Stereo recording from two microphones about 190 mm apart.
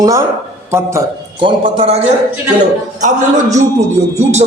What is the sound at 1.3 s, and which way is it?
Speech, 25° right (ahead or behind).